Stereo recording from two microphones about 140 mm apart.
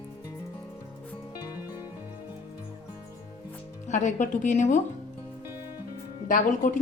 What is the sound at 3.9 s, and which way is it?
Speech, 60° left (ahead or behind).